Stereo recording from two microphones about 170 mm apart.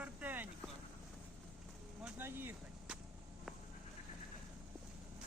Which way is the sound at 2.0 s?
10° right (ahead or behind).